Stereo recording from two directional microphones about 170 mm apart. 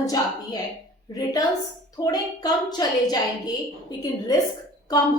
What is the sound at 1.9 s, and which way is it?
Speech, 25° left (ahead or behind).